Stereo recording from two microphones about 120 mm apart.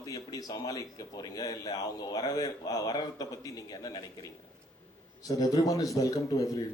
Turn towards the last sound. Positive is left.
turn(degrees=30)  # may be behind; listen again after turning